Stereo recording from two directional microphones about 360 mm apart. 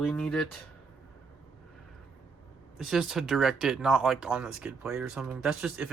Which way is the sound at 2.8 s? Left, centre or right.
Centre.